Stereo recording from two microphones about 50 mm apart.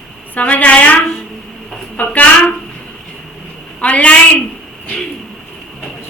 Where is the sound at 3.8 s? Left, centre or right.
Left.